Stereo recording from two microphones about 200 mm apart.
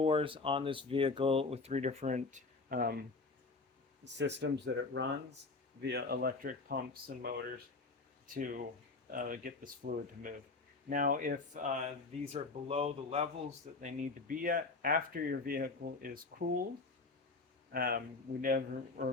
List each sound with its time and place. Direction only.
0.0 s speech: 25° right (ahead or behind); by 2.9 s 45° right (ahead or behind)
4.0 s speech: 60° right (ahead or behind); by 16.2 s 45° right (ahead or behind)
17.7 s speech: 45° right (ahead or behind)